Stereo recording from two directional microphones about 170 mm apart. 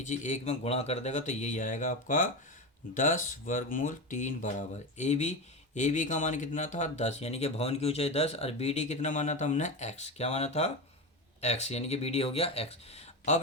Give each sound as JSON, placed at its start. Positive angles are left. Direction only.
{"t": 0.0, "sound": "speech", "side_deg": 45}